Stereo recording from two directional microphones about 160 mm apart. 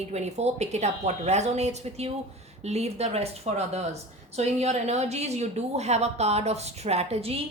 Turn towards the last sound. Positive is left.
turn(degrees=-40)  # may be behind; listen again after turning